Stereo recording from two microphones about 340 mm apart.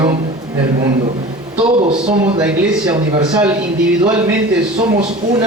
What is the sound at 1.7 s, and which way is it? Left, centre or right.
Speech, centre.